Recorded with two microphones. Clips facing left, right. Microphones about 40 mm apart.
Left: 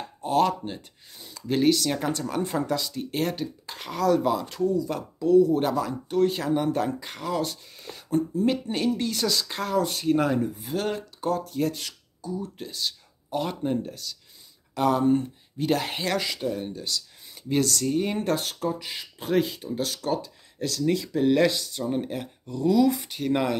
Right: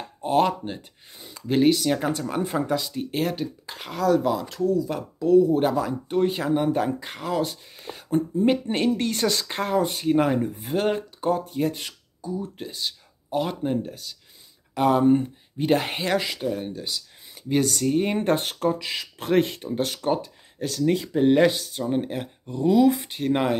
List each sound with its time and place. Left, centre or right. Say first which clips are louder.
0.2 s speech: right 2 dB; right
7.8 s speech: right 1 dB; right
9.8 s speech: right 2 dB; centre
10.2 s speech: right 2 dB; right
18.8 s speech: right 5 dB; right
19.7 s speech: right 3 dB; right